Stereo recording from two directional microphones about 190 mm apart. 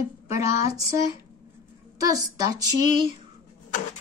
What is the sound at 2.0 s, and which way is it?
A woman's voice, 20° right (ahead or behind).